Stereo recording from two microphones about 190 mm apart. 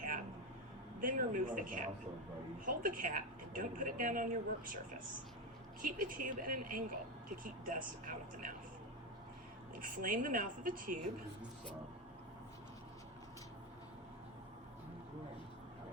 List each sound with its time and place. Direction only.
1.0 s a woman's voice: 45° right (ahead or behind)
5.8 s a woman's voice: 45° right (ahead or behind)
9.7 s a woman's voice: 45° right (ahead or behind)